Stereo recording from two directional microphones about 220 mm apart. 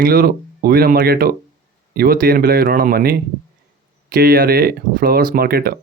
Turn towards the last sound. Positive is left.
turn(degrees=-45)  # may be behind; listen again after turning